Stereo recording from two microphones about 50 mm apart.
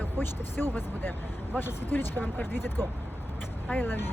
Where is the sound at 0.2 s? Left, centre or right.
Left.